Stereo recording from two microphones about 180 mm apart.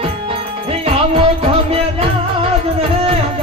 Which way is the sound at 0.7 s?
35° right (ahead or behind).